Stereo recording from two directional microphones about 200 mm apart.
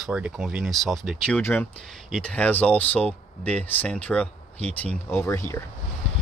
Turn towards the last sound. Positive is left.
turn(degrees=15)  # may be behind; listen again after turning